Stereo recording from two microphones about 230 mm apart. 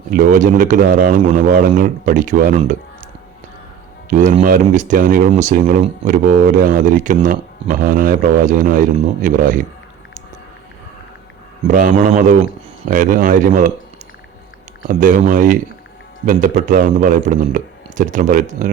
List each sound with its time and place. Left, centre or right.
0.1 s speech: right
4.1 s speech: right
11.7 s speech: right
14.8 s speech: right